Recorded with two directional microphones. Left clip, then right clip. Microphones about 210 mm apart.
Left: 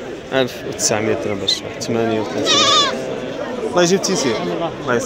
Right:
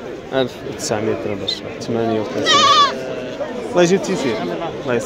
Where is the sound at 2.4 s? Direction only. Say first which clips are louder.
Right 2 dB; 35° right (ahead or behind).